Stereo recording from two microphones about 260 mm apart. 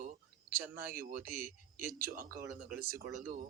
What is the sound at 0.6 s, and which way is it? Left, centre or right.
Speech, centre.